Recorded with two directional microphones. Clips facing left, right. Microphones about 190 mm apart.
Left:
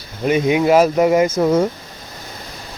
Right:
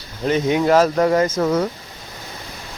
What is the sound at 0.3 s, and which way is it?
Speech, 10° left (ahead or behind).